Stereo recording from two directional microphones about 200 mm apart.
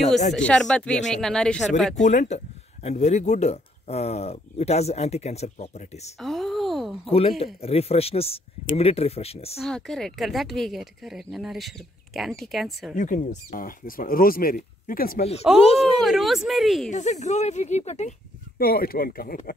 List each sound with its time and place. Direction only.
0.3 s a woman's voice: 5° left (ahead or behind)
2.0 s speech: 35° left (ahead or behind)
6.1 s a sound: centre (ahead or behind)
7.1 s speech: 30° left (ahead or behind)
9.6 s a woman's voice: centre (ahead or behind)
12.9 s speech: 40° left (ahead or behind)
15.5 s a woman's voice: centre (ahead or behind)
16.9 s speech: 35° left (ahead or behind)
18.6 s speech: 50° left (ahead or behind)